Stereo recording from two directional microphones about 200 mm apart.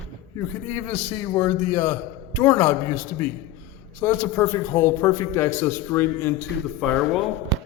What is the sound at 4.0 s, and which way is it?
A man's voice, 10° left (ahead or behind).